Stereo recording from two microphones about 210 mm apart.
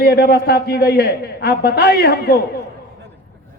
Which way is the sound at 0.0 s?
50° left (ahead or behind).